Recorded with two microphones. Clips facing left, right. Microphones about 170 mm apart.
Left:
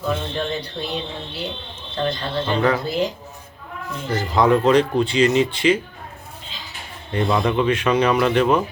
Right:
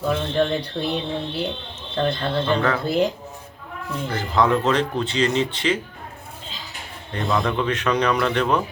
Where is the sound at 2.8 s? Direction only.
55° right (ahead or behind).